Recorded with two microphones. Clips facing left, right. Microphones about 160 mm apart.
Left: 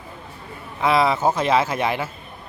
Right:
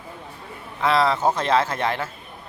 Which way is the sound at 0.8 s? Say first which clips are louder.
Left 1 dB; 15° left (ahead or behind).